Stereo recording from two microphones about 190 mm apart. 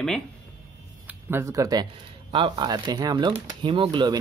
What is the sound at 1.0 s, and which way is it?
Speech, 15° right (ahead or behind).